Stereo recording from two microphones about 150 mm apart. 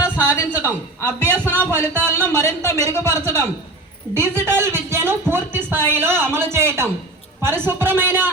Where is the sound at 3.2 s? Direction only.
20° left (ahead or behind).